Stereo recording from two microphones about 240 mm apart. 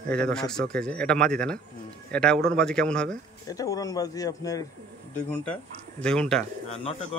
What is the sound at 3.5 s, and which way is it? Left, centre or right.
Speech, centre.